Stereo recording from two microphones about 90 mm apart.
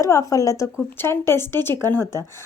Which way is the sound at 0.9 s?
30° left (ahead or behind).